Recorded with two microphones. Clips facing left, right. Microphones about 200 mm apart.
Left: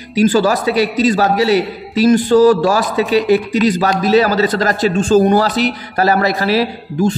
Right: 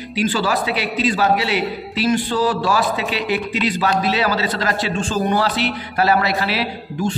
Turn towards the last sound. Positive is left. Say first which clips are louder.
# left 7 dB
turn(degrees=40)  # may be behind; listen again after turning